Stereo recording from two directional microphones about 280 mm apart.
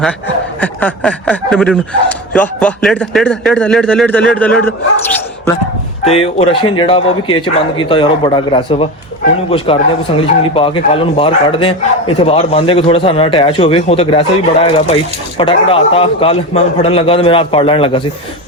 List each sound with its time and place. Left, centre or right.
0.6 s speech: centre
6.1 s speech: left